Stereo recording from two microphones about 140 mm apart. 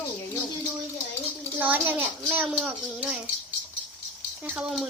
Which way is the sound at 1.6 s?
10° right (ahead or behind).